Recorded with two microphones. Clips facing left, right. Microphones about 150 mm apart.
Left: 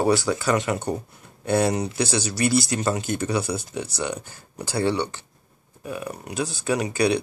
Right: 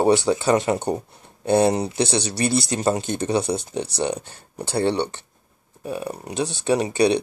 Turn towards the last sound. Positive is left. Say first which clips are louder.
# right 3 dB
turn(degrees=-25)  # may be behind; listen again after turning